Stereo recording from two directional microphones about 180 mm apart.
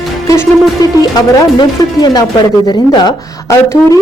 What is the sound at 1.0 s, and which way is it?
Speech, 20° left (ahead or behind).